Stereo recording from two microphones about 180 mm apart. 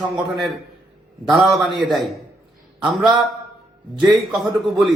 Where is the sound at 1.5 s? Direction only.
Centre (ahead or behind).